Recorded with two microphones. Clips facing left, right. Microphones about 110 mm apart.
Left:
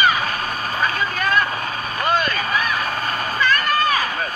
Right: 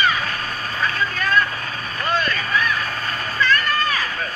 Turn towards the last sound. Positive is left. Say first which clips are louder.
# left 2 dB
turn(degrees=15)  # may be behind; listen again after turning